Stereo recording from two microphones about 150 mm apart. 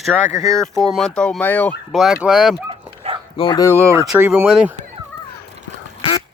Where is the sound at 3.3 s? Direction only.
35° left (ahead or behind).